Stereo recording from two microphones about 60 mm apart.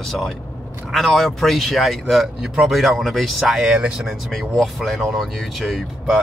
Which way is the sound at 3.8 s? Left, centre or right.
Centre.